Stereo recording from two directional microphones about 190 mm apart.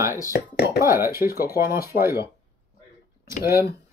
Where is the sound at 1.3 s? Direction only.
50° left (ahead or behind).